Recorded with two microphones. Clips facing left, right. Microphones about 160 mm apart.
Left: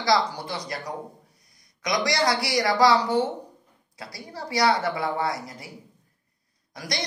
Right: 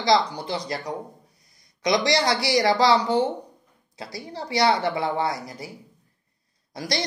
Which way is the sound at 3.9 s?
25° right (ahead or behind).